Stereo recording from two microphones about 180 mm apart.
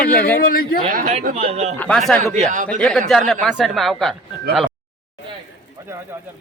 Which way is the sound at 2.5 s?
45° right (ahead or behind).